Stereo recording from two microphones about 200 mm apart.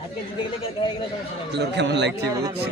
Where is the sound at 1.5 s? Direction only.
60° right (ahead or behind).